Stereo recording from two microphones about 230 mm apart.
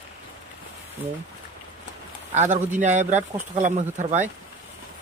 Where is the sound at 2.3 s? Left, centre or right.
Right.